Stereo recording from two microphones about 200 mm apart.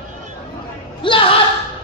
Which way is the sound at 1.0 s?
25° left (ahead or behind).